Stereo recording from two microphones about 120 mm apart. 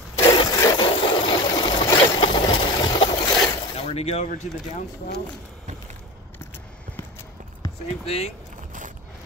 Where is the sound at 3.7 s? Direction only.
60° left (ahead or behind).